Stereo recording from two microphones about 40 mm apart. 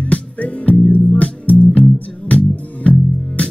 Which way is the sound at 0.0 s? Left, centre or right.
Left.